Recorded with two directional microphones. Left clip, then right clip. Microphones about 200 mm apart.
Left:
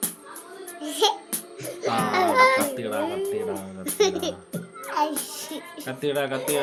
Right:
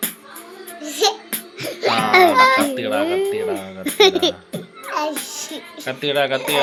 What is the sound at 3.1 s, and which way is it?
Music, 25° right (ahead or behind).